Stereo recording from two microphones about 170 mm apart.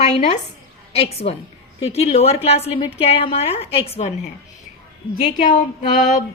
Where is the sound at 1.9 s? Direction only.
35° left (ahead or behind).